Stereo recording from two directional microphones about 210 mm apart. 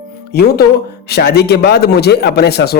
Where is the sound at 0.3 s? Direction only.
50° left (ahead or behind).